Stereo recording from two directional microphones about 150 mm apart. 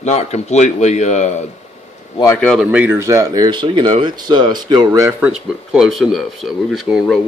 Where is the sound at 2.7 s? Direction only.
10° right (ahead or behind).